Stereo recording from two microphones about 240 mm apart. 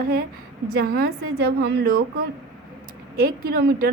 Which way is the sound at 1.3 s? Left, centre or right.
Right.